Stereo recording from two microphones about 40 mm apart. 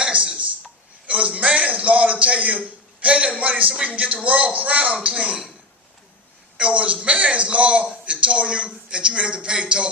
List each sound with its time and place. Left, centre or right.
0.0 s a sound: right
1.0 s a man's voice: right
6.6 s a man's voice: right